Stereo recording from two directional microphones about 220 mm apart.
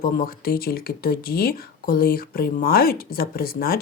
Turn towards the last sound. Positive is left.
turn(degrees=45)  # may be behind; listen again after turning